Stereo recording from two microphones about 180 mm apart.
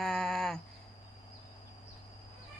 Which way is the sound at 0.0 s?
5° left (ahead or behind).